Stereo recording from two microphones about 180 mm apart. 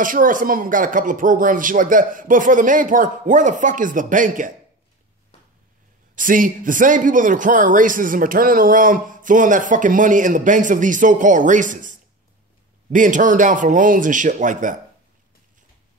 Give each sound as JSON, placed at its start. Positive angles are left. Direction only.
{"t": 0.0, "sound": "speech", "side_deg": -50}
{"t": 6.1, "sound": "speech", "side_deg": -50}